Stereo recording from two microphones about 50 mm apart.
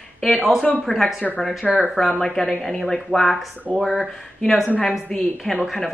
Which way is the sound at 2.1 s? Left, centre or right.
Centre.